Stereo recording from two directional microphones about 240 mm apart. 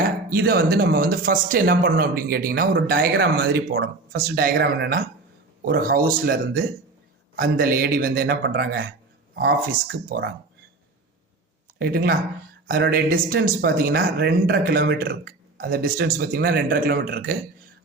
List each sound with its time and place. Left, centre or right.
0.3 s speech: right
10.1 s speech: right
11.8 s speech: right